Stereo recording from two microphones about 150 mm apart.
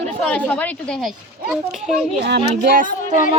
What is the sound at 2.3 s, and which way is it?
Speech, 90° right.